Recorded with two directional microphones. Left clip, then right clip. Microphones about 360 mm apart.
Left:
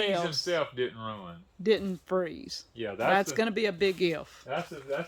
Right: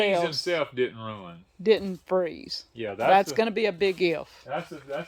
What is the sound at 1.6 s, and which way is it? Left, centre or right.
Speech, centre.